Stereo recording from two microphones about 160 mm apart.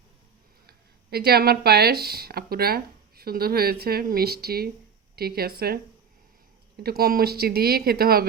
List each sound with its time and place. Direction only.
0.7 s speech: 80° right